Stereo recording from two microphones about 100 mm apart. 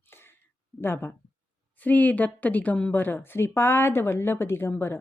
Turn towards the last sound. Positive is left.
turn(degrees=20)  # may be behind; listen again after turning